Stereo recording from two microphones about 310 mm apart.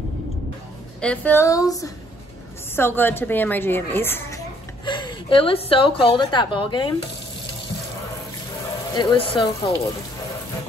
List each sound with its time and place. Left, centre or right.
1.0 s a woman's voice: centre
8.9 s a woman's voice: centre